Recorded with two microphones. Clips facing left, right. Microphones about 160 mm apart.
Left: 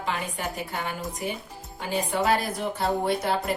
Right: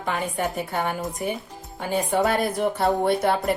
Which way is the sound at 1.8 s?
55° right (ahead or behind).